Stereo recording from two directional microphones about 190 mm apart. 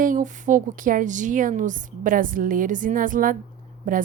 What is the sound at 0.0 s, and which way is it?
A woman's voice, 45° right (ahead or behind).